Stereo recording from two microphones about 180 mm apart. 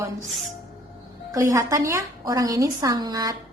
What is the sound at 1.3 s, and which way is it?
A woman's voice, 15° right (ahead or behind).